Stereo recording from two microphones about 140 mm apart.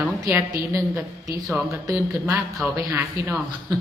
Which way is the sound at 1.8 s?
20° right (ahead or behind).